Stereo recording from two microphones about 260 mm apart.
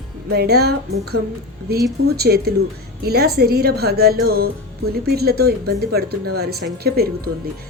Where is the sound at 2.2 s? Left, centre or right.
Right.